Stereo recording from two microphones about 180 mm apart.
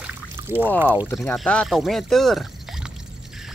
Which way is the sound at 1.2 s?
5° left (ahead or behind).